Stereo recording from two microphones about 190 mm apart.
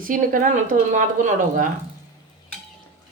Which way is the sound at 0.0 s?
45° right (ahead or behind).